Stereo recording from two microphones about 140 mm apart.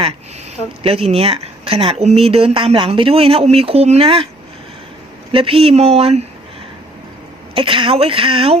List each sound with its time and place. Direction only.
0.8 s speech: 45° right (ahead or behind)
5.3 s speech: 40° right (ahead or behind)
7.5 s speech: 40° right (ahead or behind)